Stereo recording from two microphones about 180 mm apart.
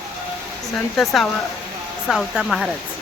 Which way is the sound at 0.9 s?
Centre (ahead or behind).